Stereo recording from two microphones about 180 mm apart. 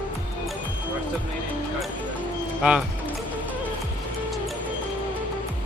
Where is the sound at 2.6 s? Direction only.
10° right (ahead or behind).